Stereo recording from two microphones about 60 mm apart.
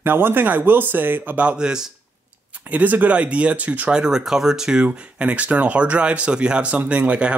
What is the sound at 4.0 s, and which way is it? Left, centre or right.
Speech, centre.